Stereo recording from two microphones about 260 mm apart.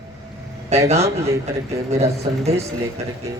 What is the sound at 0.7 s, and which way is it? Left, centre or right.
A man's voice, right.